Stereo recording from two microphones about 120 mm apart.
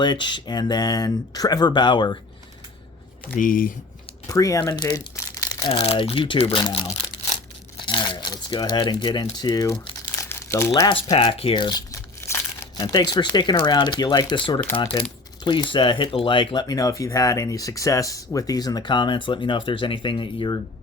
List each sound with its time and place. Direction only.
0.0 s speech: 40° left (ahead or behind)
4.3 s speech: 30° left (ahead or behind)
4.8 s crumpling: 35° left (ahead or behind)
5.6 s speech: 55° left (ahead or behind)
7.9 s speech: 40° left (ahead or behind)
10.2 s crumpling: 20° left (ahead or behind)
11.2 s speech: 50° left (ahead or behind)
11.9 s speech: 25° left (ahead or behind); by 20.6 s 40° left (ahead or behind)